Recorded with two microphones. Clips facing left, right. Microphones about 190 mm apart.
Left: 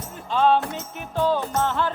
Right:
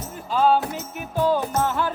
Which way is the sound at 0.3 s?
5° right (ahead or behind).